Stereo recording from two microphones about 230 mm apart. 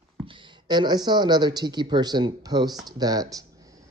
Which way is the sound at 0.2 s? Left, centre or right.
Right.